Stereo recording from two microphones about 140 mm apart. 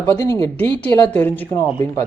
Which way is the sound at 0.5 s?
10° left (ahead or behind).